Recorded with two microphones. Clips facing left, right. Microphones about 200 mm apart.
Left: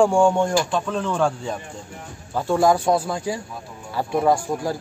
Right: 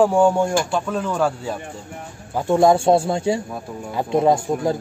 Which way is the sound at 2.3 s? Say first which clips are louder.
Right 3 dB; 20° right (ahead or behind).